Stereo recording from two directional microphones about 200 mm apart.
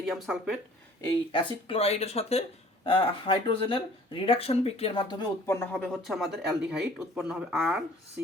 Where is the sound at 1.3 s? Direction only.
30° left (ahead or behind).